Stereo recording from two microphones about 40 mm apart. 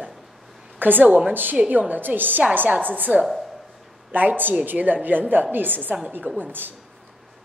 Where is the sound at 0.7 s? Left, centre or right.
Right.